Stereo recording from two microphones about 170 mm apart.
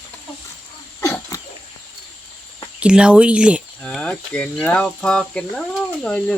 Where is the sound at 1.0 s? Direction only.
15° left (ahead or behind).